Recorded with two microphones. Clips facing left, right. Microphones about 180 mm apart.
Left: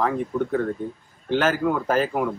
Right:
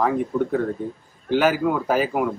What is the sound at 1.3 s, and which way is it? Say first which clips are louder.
Speech: right 2 dB; 10° right (ahead or behind).